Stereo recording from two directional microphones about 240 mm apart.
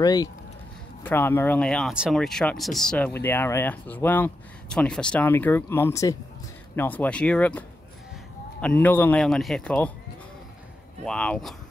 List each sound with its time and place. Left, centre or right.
0.0 s speech: centre
11.1 s speech: centre